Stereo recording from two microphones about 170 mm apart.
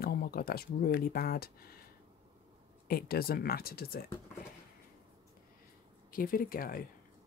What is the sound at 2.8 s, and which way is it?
Speech, 60° left (ahead or behind).